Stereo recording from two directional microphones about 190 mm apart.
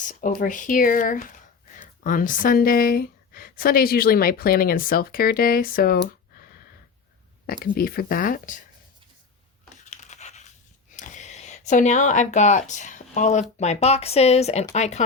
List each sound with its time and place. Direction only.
0.0 s speech: 45° left (ahead or behind)
9.9 s a sound: 40° left (ahead or behind)
10.9 s speech: 40° left (ahead or behind)